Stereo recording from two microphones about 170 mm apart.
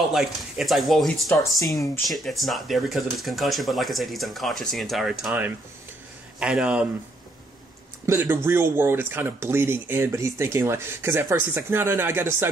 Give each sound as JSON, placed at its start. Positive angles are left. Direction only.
{"t": 0.1, "sound": "speech", "side_deg": 0}
{"t": 8.1, "sound": "speech", "side_deg": -15}